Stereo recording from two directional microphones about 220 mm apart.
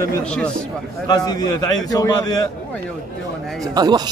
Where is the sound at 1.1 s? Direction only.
20° left (ahead or behind).